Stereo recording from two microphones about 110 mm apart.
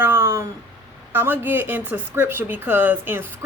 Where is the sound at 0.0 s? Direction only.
20° right (ahead or behind).